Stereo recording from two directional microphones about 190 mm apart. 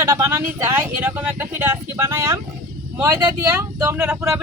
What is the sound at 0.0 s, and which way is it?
Speech, 15° right (ahead or behind).